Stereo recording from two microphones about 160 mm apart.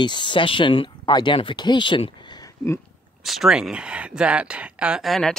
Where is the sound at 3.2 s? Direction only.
Centre (ahead or behind).